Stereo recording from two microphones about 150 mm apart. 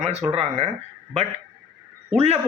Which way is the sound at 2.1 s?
45° right (ahead or behind).